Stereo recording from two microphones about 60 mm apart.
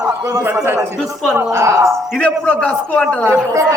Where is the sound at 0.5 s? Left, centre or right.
Right.